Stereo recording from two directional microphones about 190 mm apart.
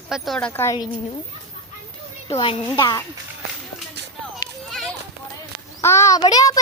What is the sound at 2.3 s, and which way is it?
Speech, 30° left (ahead or behind).